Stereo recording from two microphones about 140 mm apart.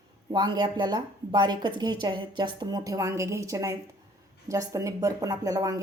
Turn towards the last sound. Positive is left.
turn(degrees=-25)  # may be behind; listen again after turning